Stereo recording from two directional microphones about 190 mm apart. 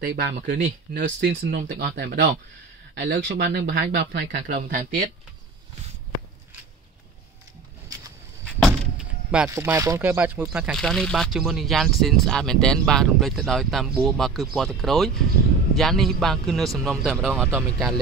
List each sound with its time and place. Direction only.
0.0 s speech: 50° right (ahead or behind)
8.6 s door: 5° right (ahead or behind)
9.5 s speech: 15° right (ahead or behind)